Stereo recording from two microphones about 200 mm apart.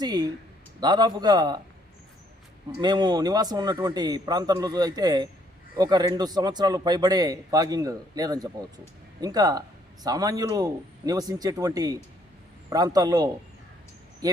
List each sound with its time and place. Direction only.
0.0 s a man's voice: 20° right (ahead or behind)
2.8 s a man's voice: 20° right (ahead or behind)